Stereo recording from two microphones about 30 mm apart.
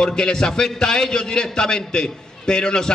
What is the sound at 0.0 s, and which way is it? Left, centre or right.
A man's voice, left.